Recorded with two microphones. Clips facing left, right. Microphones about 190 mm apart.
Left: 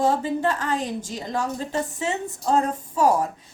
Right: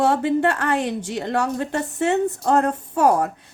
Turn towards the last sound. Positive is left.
turn(degrees=-60)  # may be behind; listen again after turning